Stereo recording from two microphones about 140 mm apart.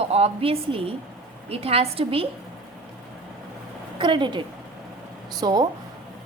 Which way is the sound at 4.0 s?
35° right (ahead or behind).